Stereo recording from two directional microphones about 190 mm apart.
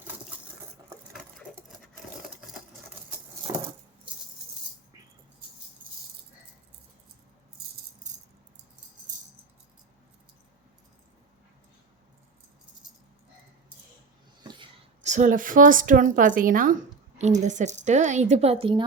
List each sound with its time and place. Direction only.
1.7 s sewing machine: centre (ahead or behind)
3.5 s a sound: 20° right (ahead or behind)
5.8 s keys jangling: 45° right (ahead or behind)
15.0 s a woman's voice: 40° right (ahead or behind)